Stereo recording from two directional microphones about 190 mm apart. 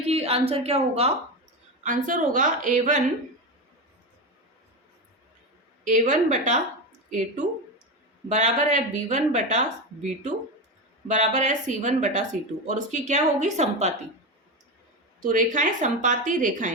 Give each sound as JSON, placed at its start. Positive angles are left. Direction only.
{"t": 0.0, "sound": "a woman's voice", "side_deg": -30}
{"t": 1.8, "sound": "a woman's voice", "side_deg": -45}
{"t": 5.8, "sound": "speech", "side_deg": -40}
{"t": 15.2, "sound": "a woman's voice", "side_deg": -45}